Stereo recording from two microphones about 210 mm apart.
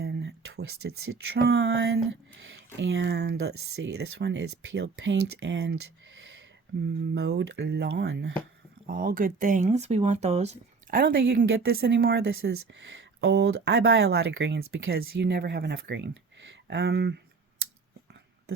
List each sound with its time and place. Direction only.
0.0 s speech: 55° right (ahead or behind)
7.1 s speech: 55° right (ahead or behind)
8.9 s speech: 45° right (ahead or behind)
10.9 s speech: 55° right (ahead or behind)